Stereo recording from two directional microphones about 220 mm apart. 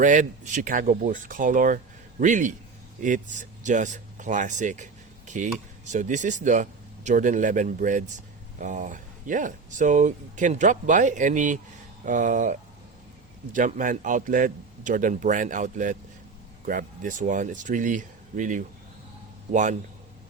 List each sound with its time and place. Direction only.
0.0 s speech: 35° right (ahead or behind)